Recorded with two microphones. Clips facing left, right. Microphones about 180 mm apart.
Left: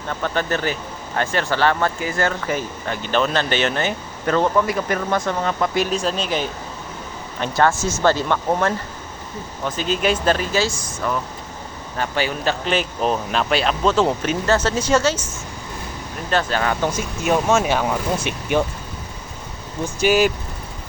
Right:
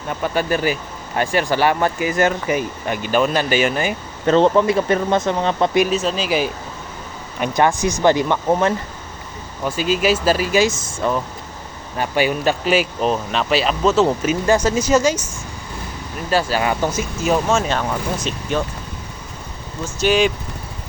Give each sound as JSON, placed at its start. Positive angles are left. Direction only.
{"t": 0.1, "sound": "speech", "side_deg": -10}
{"t": 4.3, "sound": "speech", "side_deg": -25}
{"t": 5.8, "sound": "speech", "side_deg": -5}
{"t": 11.9, "sound": "speech", "side_deg": -15}
{"t": 16.3, "sound": "speech", "side_deg": -10}
{"t": 19.8, "sound": "speech", "side_deg": 10}